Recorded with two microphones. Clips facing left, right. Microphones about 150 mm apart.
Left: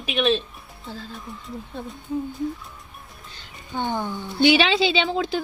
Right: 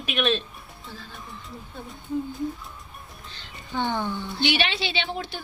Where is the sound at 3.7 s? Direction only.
15° left (ahead or behind).